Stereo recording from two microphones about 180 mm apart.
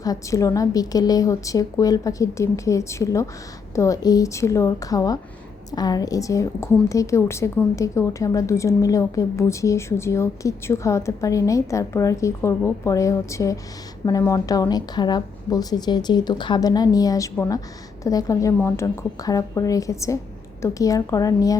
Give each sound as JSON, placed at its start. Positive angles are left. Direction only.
{"t": 0.0, "sound": "a woman's voice", "side_deg": 20}